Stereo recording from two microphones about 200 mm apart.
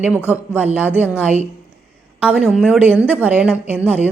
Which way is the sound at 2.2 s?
5° right (ahead or behind).